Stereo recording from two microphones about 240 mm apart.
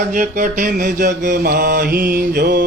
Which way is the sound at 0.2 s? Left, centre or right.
Right.